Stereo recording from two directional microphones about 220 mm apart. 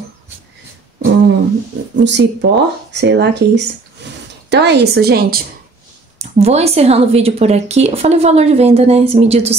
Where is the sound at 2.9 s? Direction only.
50° right (ahead or behind).